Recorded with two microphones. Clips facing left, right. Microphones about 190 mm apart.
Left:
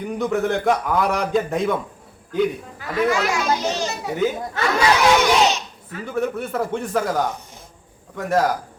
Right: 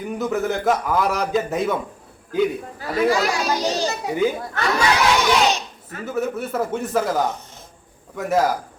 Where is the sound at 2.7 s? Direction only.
35° right (ahead or behind).